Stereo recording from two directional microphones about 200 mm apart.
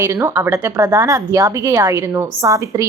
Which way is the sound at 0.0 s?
15° right (ahead or behind).